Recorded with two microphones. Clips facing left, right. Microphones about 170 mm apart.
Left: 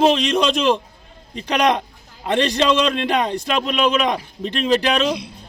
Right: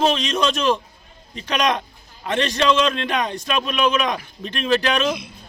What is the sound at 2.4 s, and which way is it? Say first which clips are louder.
Speech: left 1 dB; 20° left (ahead or behind).